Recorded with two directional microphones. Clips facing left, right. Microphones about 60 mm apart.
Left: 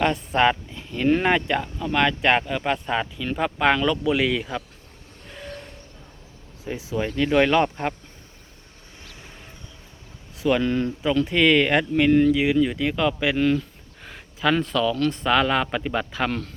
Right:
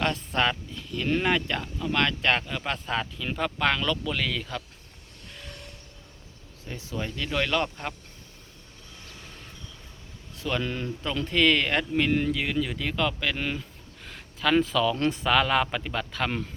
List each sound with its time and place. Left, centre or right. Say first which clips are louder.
0.0 s speech: left 6 dB; centre
6.7 s speech: left 7 dB; centre
7.2 s speech: left 9 dB; left
10.3 s a sound: left 9 dB; centre
10.6 s speech: left 8 dB; centre
13.3 s speech: left 10 dB; centre
14.0 s a sound: left 4 dB; centre
14.5 s speech: right 1 dB; centre